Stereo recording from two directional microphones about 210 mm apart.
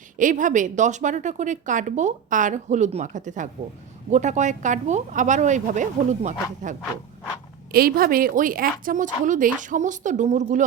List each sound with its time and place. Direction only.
0.2 s a woman's voice: 40° right (ahead or behind)